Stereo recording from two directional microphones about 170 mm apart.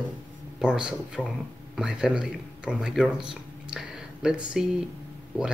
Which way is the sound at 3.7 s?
5° right (ahead or behind).